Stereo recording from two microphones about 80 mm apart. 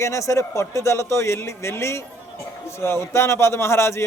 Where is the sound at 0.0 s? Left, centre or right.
Left.